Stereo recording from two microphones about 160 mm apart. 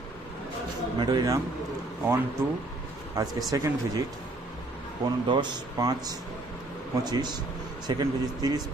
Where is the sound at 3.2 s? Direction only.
20° right (ahead or behind).